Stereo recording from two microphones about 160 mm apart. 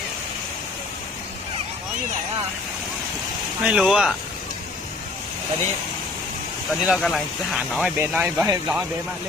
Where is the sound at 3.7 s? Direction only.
5° right (ahead or behind).